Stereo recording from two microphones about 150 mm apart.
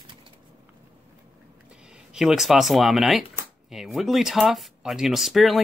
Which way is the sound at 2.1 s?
5° right (ahead or behind).